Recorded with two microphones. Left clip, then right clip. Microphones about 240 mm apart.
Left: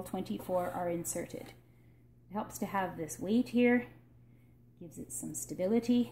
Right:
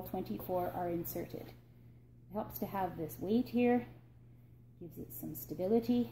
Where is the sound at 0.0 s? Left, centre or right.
Left.